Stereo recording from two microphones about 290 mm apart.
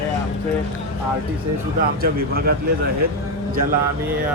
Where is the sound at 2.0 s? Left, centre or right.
Right.